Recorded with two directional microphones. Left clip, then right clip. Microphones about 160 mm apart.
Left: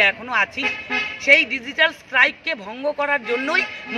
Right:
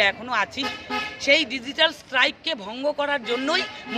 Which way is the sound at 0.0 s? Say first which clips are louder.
Left 4 dB; 15° right (ahead or behind).